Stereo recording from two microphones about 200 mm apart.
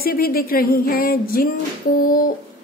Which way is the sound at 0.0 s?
50° left (ahead or behind).